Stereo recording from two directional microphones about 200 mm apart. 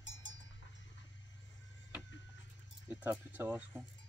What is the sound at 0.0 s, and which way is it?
Cowbell, 70° left (ahead or behind).